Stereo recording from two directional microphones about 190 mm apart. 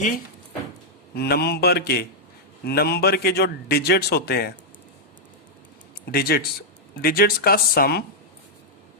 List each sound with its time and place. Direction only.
1.1 s a man's voice: 55° left (ahead or behind)
6.1 s speech: 55° left (ahead or behind)